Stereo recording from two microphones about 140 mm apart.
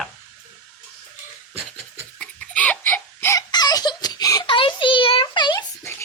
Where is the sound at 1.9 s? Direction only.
10° left (ahead or behind).